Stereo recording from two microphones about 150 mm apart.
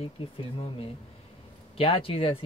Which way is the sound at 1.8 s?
40° left (ahead or behind).